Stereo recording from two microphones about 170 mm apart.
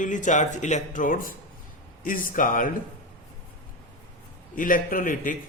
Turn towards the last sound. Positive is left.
turn(degrees=50)  # may be behind; listen again after turning